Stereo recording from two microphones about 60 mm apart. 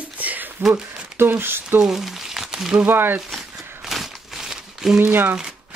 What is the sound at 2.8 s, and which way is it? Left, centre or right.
Speech, right.